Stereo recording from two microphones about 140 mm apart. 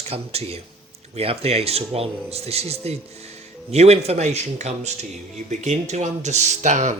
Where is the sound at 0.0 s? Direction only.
45° right (ahead or behind).